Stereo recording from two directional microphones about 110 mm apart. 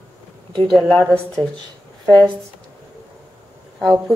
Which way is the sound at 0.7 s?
Centre (ahead or behind).